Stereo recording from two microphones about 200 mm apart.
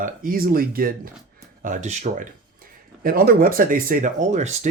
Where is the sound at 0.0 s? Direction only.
45° right (ahead or behind).